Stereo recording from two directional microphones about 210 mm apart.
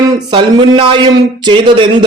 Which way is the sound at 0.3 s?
20° right (ahead or behind).